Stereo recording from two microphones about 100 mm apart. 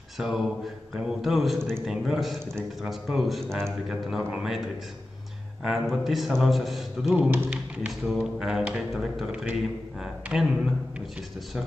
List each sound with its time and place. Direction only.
0.2 s a man's voice: 5° right (ahead or behind)
7.2 s speech: 20° right (ahead or behind)
7.4 s a man's voice: 10° right (ahead or behind)